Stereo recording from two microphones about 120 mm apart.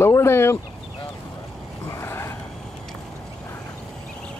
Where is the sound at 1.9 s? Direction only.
20° left (ahead or behind).